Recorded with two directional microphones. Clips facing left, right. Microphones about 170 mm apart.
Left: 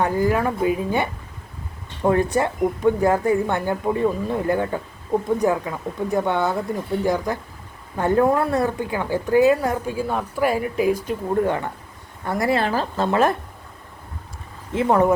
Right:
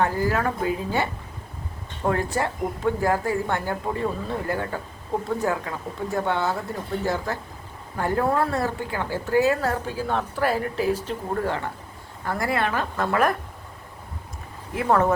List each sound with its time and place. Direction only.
0.0 s speech: 20° left (ahead or behind)
2.0 s a woman's voice: 20° left (ahead or behind)
14.7 s speech: 20° left (ahead or behind)